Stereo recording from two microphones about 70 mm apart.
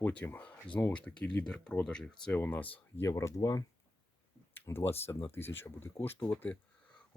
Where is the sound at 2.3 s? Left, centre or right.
Left.